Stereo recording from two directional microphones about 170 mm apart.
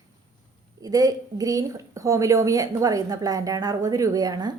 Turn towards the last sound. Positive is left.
turn(degrees=-25)  # may be behind; listen again after turning